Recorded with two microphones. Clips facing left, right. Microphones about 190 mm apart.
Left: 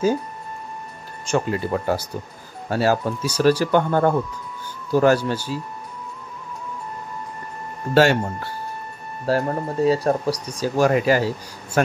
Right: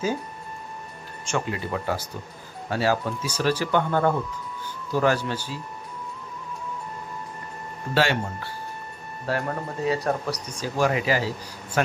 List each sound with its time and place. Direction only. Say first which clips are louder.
1.2 s speech: left 6 dB; 40° left (ahead or behind)
7.9 s speech: left 7 dB; 45° left (ahead or behind)
10.8 s speech: left 5 dB; 45° left (ahead or behind)